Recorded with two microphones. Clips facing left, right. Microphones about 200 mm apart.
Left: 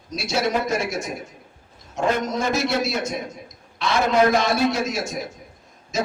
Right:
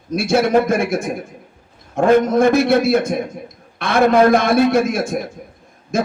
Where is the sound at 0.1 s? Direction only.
55° right (ahead or behind).